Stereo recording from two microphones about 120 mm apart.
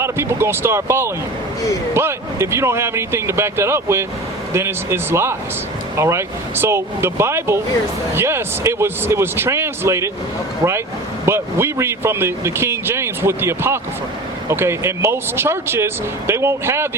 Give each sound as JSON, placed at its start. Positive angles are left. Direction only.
{"t": 0.0, "sound": "speech", "side_deg": -20}